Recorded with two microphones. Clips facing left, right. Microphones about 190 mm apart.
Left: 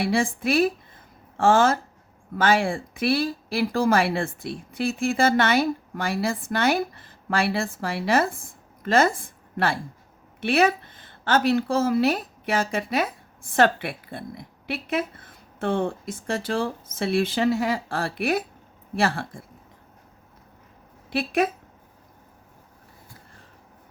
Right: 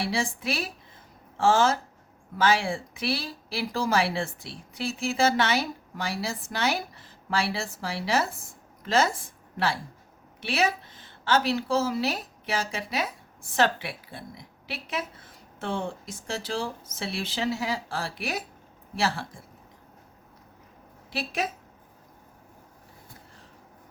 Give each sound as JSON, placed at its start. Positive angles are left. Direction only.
{"t": 0.0, "sound": "a woman's voice", "side_deg": 55}
{"t": 21.1, "sound": "a woman's voice", "side_deg": 55}